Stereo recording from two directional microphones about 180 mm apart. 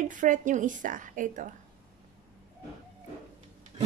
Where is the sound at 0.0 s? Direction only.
45° right (ahead or behind).